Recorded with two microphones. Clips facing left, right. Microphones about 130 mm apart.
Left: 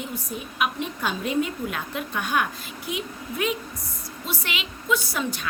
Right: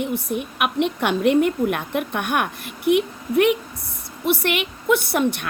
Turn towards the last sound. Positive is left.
turn(degrees=-60)  # may be behind; listen again after turning